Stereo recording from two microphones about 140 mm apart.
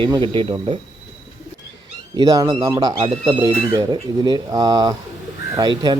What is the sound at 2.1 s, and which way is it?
Speech, 25° right (ahead or behind).